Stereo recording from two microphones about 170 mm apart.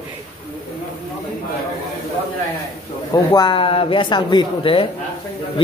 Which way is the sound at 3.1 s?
25° left (ahead or behind).